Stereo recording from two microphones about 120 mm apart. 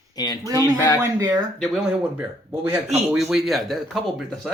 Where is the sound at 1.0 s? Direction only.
30° right (ahead or behind).